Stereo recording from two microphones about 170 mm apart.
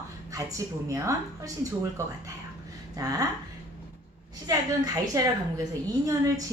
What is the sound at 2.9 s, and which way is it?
Speech, 20° right (ahead or behind).